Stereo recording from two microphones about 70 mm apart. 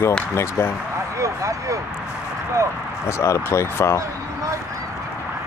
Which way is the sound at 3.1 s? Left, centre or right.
Left.